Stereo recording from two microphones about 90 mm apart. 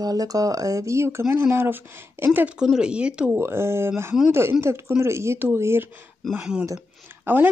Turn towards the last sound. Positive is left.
turn(degrees=-25)  # may be behind; listen again after turning